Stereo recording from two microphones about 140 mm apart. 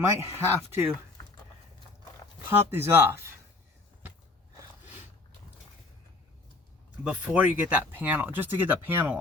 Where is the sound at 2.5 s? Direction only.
15° right (ahead or behind).